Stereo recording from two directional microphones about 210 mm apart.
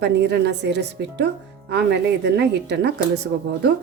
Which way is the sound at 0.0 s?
50° right (ahead or behind).